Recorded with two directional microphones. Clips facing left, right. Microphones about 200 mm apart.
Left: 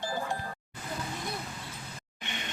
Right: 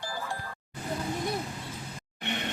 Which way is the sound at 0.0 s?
20° left (ahead or behind).